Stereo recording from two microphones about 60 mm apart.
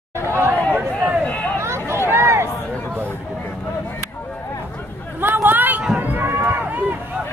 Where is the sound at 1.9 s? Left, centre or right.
Right.